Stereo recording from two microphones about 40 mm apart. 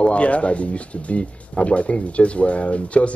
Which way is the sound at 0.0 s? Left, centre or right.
Left.